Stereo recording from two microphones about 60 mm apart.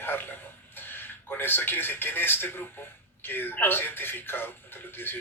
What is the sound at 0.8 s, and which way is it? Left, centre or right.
Speech, left.